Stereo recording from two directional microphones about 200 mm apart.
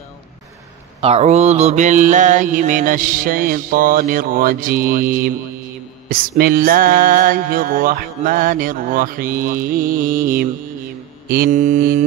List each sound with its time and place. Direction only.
1.0 s music: 35° right (ahead or behind)